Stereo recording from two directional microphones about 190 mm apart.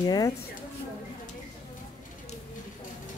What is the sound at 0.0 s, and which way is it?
Speech, 20° left (ahead or behind).